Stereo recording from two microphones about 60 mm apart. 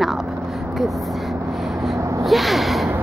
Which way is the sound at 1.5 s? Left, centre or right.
Centre.